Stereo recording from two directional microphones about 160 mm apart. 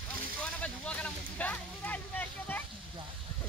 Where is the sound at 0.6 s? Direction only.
10° left (ahead or behind).